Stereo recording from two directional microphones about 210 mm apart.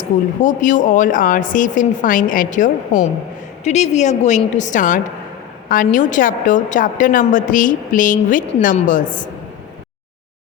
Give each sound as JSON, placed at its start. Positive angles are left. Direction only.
{"t": 0.0, "sound": "a woman's voice", "side_deg": 35}